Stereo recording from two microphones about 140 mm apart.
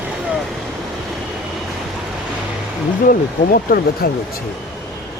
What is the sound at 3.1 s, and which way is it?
Speech, 90° left.